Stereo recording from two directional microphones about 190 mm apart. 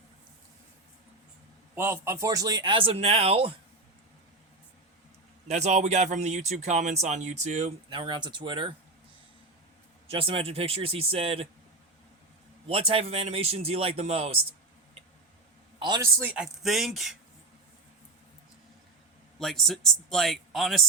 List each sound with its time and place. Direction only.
1.7 s a man's voice: 15° right (ahead or behind); by 3.5 s 30° right (ahead or behind)
5.5 s speech: 35° right (ahead or behind)
7.9 s a man's voice: 25° right (ahead or behind)
10.1 s a man's voice: 30° right (ahead or behind)
12.6 s speech: 30° right (ahead or behind)
15.8 s a man's voice: 20° right (ahead or behind)
16.2 s speech: 5° right (ahead or behind)
19.4 s speech: centre (ahead or behind)